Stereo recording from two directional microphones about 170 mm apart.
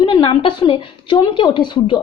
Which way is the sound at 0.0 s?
30° left (ahead or behind).